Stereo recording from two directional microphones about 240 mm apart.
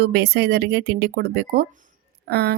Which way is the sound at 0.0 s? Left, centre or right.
Right.